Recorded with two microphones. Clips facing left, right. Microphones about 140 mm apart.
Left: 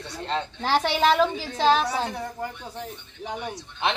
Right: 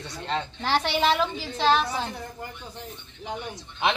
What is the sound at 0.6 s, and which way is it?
A woman's voice, 45° left (ahead or behind).